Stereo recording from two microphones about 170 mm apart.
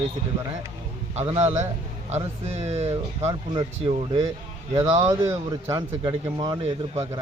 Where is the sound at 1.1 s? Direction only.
40° right (ahead or behind).